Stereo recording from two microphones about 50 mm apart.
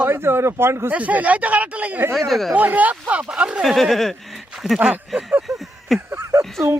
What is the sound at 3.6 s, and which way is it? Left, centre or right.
Speech, centre.